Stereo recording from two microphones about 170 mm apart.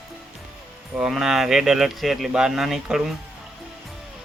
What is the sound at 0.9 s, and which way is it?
Speech, 5° right (ahead or behind).